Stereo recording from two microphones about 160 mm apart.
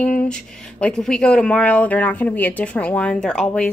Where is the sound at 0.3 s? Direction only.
5° left (ahead or behind).